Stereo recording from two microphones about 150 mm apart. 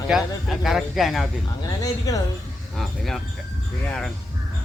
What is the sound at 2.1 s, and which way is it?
Speech, 25° left (ahead or behind).